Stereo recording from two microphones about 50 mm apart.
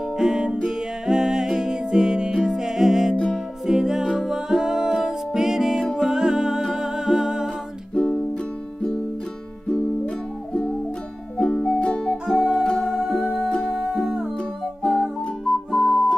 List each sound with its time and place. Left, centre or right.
0.2 s music: centre
7.9 s music: centre
9.7 s music: centre
11.8 s music: left
12.3 s music: centre
12.6 s music: centre
12.9 s music: centre
13.5 s music: centre
13.7 s music: centre